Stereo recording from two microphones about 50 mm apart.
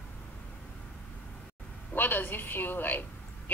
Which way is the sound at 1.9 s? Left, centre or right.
Left.